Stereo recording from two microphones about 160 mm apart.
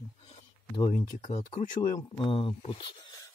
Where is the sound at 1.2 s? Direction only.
40° left (ahead or behind).